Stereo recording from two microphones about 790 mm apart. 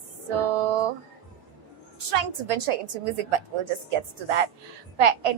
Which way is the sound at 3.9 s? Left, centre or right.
Right.